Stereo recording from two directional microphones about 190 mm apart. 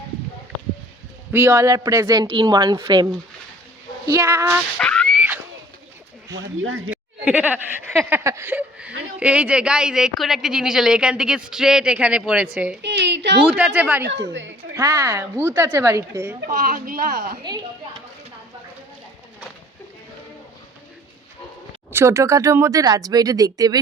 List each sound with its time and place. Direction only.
1.3 s a woman's voice: 10° right (ahead or behind)
4.8 s a sound: 5° left (ahead or behind)
6.3 s speech: 80° right
6.9 s sheep: 10° right (ahead or behind)
8.1 s speech: 15° right (ahead or behind)
12.8 s a woman's voice: 65° right (ahead or behind)
13.5 s speech: 5° right (ahead or behind)
14.0 s a woman's voice: 65° right (ahead or behind)
14.8 s speech: 15° right (ahead or behind)
16.5 s speech: 45° right (ahead or behind)
21.9 s speech: 15° right (ahead or behind)